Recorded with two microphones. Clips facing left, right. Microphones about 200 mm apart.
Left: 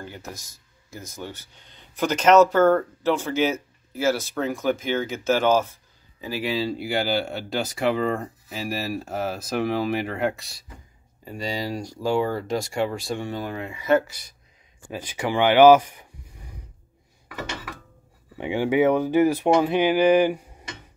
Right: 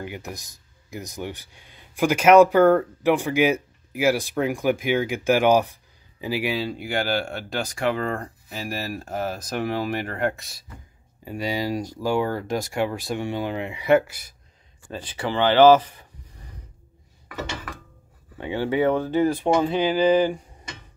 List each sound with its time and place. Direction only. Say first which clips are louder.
0.0 s speech: right 3 dB; 15° right (ahead or behind)
6.5 s speech: left 1 dB; centre (ahead or behind)
13.4 s speech: right 3 dB; 20° right (ahead or behind)
14.9 s speech: left 1 dB; 10° left (ahead or behind)
18.4 s speech: left 2 dB; 15° left (ahead or behind)